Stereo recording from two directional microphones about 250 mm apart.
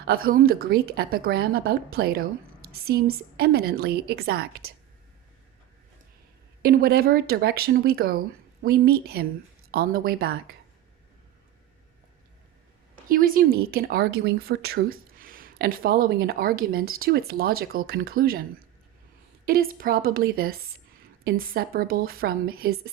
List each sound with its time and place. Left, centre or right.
0.0 s speech: right
6.6 s speech: right
13.1 s speech: right
19.5 s speech: right